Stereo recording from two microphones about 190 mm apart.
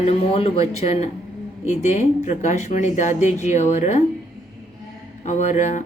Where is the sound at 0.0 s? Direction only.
35° left (ahead or behind).